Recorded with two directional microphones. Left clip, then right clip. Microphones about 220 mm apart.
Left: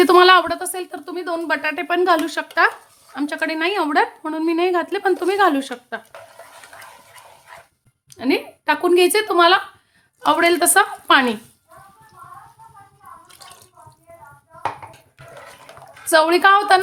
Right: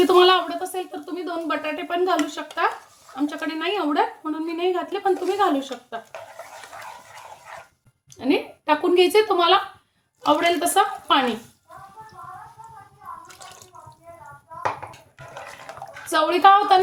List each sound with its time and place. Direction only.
0.1 s speech: 50° left (ahead or behind)
8.1 s speech: 50° left (ahead or behind)
16.1 s speech: 50° left (ahead or behind)